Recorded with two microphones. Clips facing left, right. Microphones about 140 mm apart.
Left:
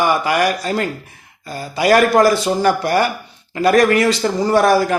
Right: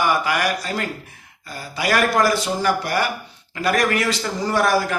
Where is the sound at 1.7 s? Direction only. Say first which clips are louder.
Left 7 dB; 35° left (ahead or behind).